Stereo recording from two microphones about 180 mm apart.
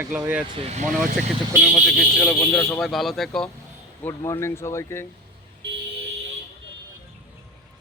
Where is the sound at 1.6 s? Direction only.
Centre (ahead or behind).